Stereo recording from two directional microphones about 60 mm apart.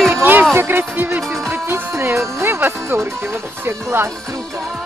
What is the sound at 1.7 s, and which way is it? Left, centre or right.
Music, right.